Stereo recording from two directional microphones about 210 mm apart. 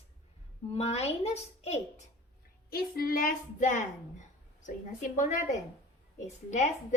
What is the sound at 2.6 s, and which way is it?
A woman's voice, 45° left (ahead or behind).